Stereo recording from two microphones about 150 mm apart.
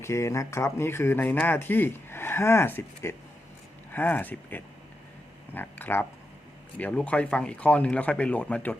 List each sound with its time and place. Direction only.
0.0 s speech: 20° left (ahead or behind)